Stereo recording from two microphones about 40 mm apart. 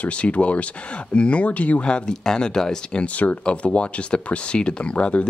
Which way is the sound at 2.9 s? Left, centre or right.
Left.